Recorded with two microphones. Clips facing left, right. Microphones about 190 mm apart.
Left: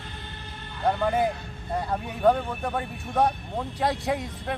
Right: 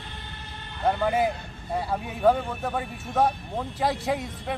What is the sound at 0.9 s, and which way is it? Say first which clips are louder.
Speech: even; 5° right (ahead or behind).